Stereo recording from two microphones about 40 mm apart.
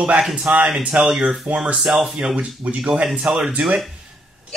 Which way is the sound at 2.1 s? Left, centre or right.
Right.